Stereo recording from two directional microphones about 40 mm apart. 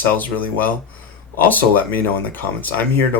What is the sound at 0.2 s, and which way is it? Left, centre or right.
Speech, left.